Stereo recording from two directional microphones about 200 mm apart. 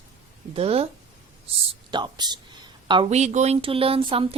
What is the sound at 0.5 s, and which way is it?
Speech, 30° right (ahead or behind).